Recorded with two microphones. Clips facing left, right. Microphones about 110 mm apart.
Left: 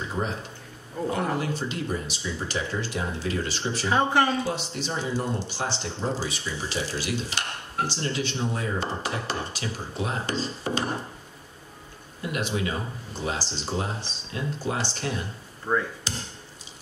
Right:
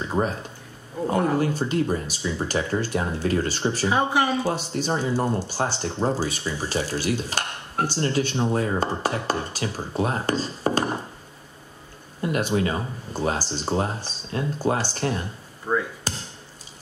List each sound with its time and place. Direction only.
0.2 s speech: 50° right (ahead or behind)
1.5 s speech: 45° right (ahead or behind)
3.9 s speech: 10° right (ahead or behind)
4.6 s speech: 45° right (ahead or behind)
12.2 s speech: 45° right (ahead or behind)
15.7 s speech: 10° right (ahead or behind)